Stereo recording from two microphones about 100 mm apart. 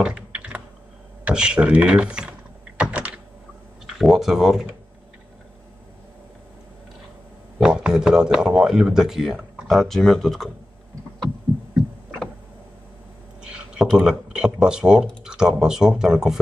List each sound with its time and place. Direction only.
0.0 s typing: 10° right (ahead or behind)
1.2 s speech: 10° right (ahead or behind)
2.8 s computer keyboard: 15° right (ahead or behind)
4.0 s speech: 5° right (ahead or behind)
7.6 s speech: 10° right (ahead or behind)
13.4 s a sound: 10° right (ahead or behind)
13.9 s speech: 10° right (ahead or behind)